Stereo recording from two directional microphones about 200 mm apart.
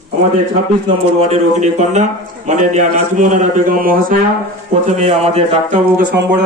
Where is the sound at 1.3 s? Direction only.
35° right (ahead or behind).